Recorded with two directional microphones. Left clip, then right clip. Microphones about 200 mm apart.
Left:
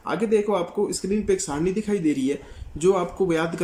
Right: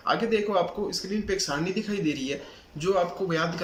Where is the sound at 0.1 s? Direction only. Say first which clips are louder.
Left 3 dB; 40° left (ahead or behind).